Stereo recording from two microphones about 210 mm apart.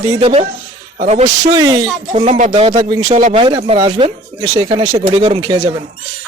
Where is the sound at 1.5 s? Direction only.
20° right (ahead or behind).